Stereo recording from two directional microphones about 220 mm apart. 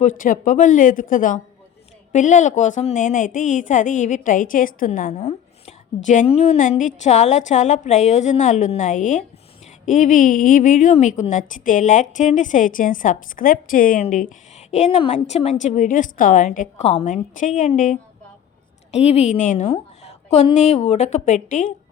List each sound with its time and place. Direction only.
0.0 s a woman's voice: 35° left (ahead or behind)